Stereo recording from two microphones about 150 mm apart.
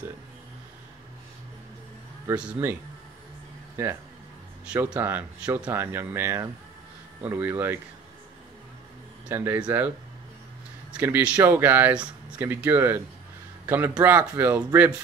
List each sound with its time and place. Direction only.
2.3 s speech: 10° right (ahead or behind)
9.3 s a man's voice: 15° right (ahead or behind)